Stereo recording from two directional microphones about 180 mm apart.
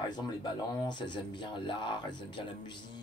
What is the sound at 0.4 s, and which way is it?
A man's voice, 25° left (ahead or behind).